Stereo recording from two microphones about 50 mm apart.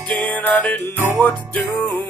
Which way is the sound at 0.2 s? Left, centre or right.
Left.